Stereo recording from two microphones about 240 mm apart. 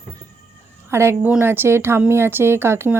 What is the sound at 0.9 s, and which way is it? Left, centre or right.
Speech, centre.